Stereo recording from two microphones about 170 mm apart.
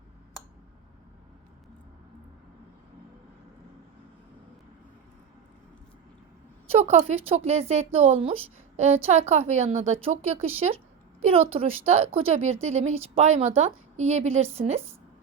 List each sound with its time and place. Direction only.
6.7 s a woman's voice: 40° right (ahead or behind)